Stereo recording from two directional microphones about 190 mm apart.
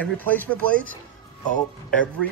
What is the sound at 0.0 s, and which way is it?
Speech, 10° left (ahead or behind).